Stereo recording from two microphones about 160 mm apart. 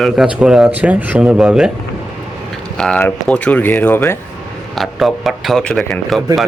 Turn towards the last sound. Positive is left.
turn(degrees=0)  # may be behind; listen again after turning